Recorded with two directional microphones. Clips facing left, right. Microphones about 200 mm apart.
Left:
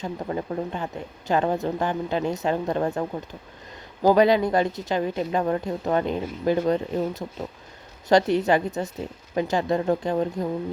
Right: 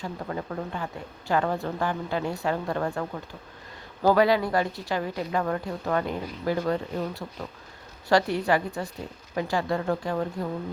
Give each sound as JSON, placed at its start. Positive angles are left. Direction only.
{"t": 0.0, "sound": "speech", "side_deg": 20}